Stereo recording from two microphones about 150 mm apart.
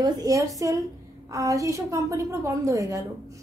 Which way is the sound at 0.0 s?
25° right (ahead or behind).